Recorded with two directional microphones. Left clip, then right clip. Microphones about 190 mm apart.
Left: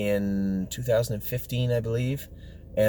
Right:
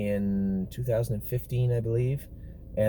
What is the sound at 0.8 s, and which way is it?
Speech, 15° left (ahead or behind).